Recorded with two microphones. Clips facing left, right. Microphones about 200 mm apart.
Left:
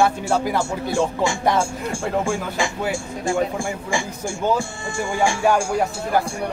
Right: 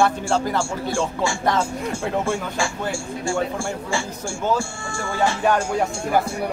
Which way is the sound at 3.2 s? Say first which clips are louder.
Left 2 dB; 15° left (ahead or behind).